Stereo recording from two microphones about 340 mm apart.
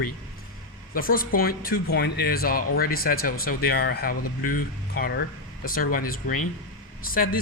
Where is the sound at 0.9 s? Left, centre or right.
Left.